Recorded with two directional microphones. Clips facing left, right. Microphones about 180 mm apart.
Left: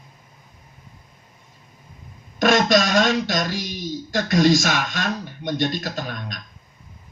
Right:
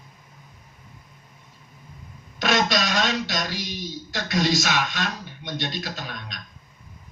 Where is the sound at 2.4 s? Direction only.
45° left (ahead or behind).